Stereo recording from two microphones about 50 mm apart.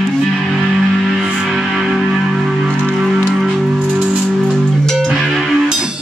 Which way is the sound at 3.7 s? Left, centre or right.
Right.